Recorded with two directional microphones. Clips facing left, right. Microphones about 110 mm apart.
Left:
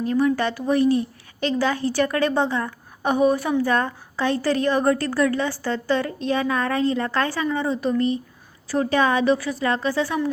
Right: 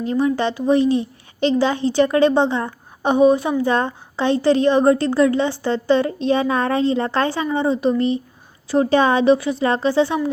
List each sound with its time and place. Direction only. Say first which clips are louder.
0.1 s a woman's voice: right 2 dB; 25° right (ahead or behind)